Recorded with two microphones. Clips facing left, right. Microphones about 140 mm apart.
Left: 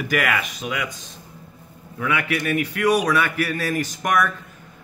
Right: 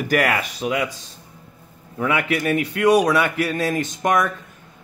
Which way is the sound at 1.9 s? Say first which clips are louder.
Right 3 dB; 30° right (ahead or behind).